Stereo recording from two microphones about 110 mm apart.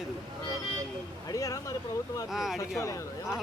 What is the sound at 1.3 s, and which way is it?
Speech, 30° left (ahead or behind).